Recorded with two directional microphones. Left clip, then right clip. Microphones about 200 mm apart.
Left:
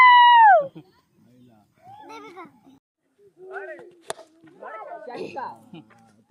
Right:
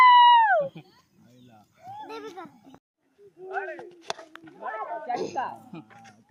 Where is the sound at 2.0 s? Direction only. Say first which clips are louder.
Right 1 dB; 10° right (ahead or behind).